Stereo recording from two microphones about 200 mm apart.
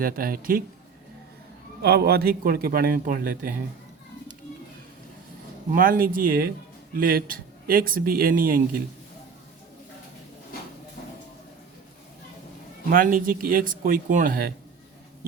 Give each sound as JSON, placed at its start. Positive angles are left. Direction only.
{"t": 0.0, "sound": "speech", "side_deg": -45}
{"t": 1.8, "sound": "speech", "side_deg": -50}
{"t": 5.7, "sound": "speech", "side_deg": -45}
{"t": 12.9, "sound": "speech", "side_deg": -45}